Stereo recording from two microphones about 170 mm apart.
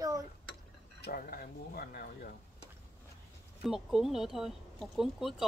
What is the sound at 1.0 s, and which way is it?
Speech, 60° left (ahead or behind).